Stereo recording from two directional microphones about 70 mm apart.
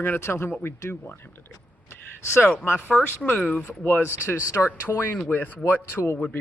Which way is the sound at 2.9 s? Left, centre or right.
Centre.